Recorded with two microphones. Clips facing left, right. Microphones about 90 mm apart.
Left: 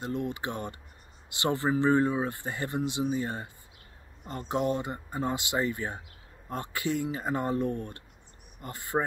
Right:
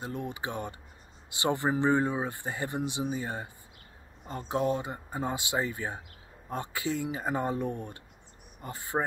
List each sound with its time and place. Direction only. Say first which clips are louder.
0.0 s speech: left 3 dB; 15° right (ahead or behind)